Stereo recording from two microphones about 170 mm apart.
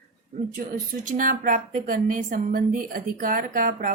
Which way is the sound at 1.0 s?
50° right (ahead or behind).